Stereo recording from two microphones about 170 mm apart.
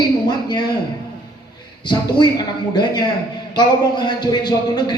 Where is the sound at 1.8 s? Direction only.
25° left (ahead or behind).